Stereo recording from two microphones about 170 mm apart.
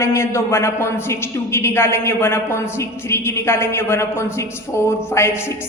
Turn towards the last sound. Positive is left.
turn(degrees=15)  # may be behind; listen again after turning